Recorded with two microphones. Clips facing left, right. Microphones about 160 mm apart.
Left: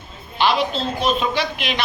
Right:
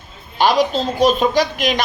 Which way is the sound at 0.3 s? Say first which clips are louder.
Right 4 dB; 40° right (ahead or behind).